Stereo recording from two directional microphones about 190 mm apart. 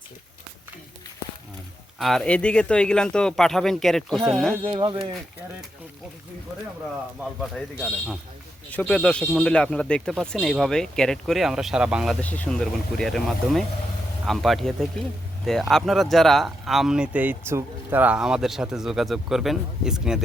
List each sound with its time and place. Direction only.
2.0 s speech: centre (ahead or behind)
4.6 s speech: 25° right (ahead or behind)
7.3 s speech: 5° left (ahead or behind)
12.2 s speech: 10° left (ahead or behind)